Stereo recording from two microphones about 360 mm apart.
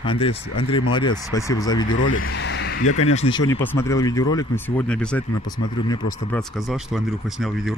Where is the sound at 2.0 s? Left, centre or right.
Left.